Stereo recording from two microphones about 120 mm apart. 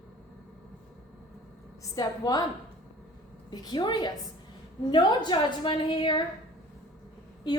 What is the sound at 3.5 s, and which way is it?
A woman's voice, 35° left (ahead or behind).